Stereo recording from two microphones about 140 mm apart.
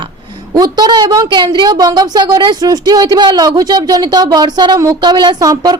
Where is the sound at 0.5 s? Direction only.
30° right (ahead or behind).